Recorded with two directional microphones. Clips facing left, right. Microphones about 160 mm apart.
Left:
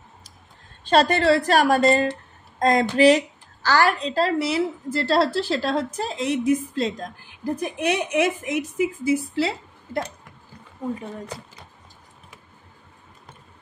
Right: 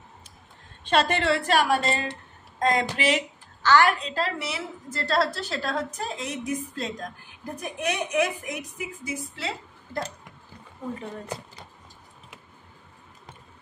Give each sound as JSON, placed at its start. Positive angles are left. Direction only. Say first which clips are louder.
{"t": 0.8, "sound": "a woman's voice", "louder": "left 5 dB", "side_deg": 35}